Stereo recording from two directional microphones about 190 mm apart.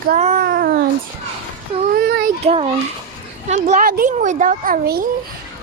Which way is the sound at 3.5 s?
40° right (ahead or behind).